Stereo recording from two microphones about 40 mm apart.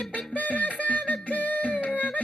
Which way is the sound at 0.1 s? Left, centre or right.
Left.